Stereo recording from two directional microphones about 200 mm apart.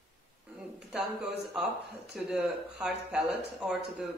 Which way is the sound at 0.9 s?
5° right (ahead or behind).